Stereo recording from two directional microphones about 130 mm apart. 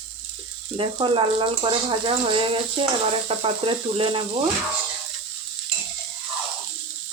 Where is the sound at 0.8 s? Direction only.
40° right (ahead or behind).